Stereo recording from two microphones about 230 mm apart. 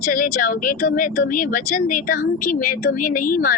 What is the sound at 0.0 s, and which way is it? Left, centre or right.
Speech, left.